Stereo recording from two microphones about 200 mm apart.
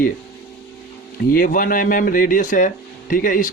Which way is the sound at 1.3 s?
45° left (ahead or behind).